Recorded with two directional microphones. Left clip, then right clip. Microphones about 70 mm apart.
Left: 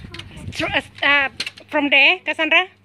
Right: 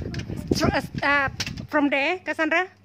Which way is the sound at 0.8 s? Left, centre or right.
Right.